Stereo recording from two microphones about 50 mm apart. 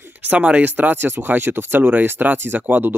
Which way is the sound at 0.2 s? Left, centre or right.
Right.